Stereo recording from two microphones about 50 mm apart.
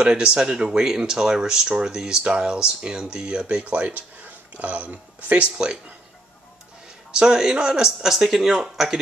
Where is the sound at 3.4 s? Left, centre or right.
Right.